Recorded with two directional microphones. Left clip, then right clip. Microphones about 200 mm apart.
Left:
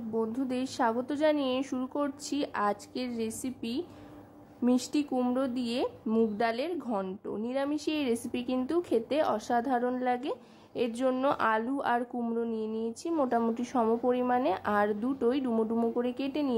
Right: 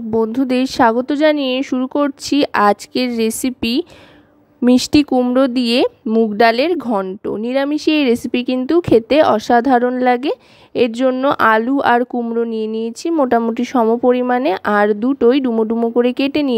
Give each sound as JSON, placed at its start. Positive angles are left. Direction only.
{"t": 0.1, "sound": "a woman's voice", "side_deg": -40}